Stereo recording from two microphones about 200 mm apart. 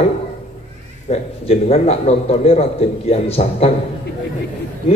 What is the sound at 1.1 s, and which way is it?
Speech, 30° left (ahead or behind).